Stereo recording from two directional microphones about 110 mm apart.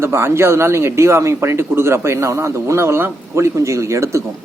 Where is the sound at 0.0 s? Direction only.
25° right (ahead or behind).